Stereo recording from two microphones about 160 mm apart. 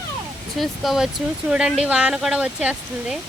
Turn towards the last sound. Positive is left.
turn(degrees=-5)  # may be behind; listen again after turning